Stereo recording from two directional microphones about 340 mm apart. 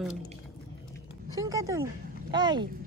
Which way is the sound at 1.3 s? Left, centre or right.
Centre.